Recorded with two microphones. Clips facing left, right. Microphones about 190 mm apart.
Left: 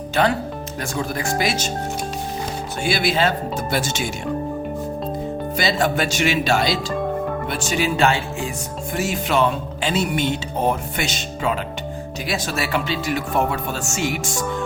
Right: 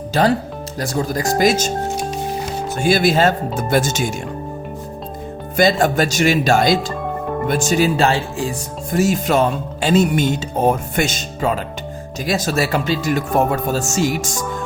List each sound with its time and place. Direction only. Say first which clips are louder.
0.1 s speech: right 3 dB; 35° right (ahead or behind)
2.8 s speech: right 5 dB; 45° right (ahead or behind)
5.5 s speech: right 6 dB; 45° right (ahead or behind)